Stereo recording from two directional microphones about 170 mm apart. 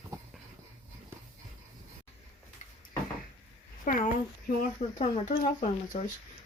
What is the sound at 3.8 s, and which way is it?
Speech, 55° left (ahead or behind).